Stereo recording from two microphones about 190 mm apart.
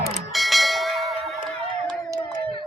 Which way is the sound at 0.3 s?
Centre (ahead or behind).